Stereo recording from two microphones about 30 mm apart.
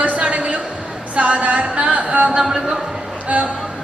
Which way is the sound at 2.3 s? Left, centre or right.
Right.